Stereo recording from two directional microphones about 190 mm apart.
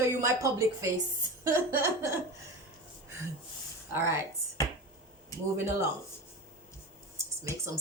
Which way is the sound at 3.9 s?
15° right (ahead or behind).